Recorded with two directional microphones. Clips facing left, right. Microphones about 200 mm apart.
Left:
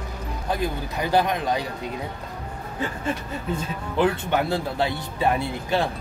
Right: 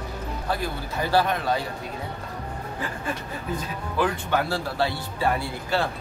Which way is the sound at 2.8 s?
25° left (ahead or behind).